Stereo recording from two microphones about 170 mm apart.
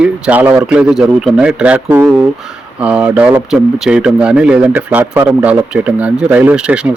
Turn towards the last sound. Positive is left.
turn(degrees=-5)  # may be behind; listen again after turning